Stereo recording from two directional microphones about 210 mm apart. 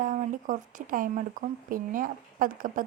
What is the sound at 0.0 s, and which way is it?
A woman's voice, 40° right (ahead or behind).